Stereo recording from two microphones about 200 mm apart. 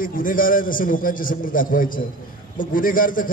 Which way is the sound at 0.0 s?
45° left (ahead or behind).